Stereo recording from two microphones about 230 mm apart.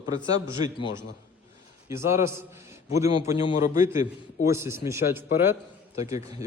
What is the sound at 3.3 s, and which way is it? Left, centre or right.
Speech, left.